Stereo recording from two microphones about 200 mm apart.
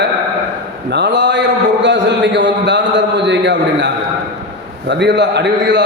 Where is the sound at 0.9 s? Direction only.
60° right (ahead or behind).